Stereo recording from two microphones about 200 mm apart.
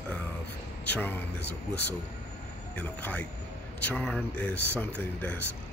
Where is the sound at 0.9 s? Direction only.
10° left (ahead or behind).